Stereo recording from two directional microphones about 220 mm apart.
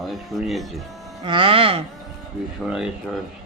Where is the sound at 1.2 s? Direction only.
25° right (ahead or behind).